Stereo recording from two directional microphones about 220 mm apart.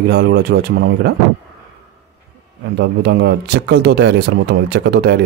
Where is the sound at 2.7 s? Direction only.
50° right (ahead or behind).